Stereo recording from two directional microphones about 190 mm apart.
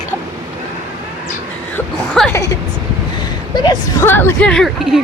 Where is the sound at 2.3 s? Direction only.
15° left (ahead or behind); by 5.0 s centre (ahead or behind).